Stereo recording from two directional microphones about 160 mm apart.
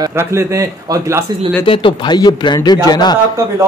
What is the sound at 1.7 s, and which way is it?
Speech, 35° left (ahead or behind).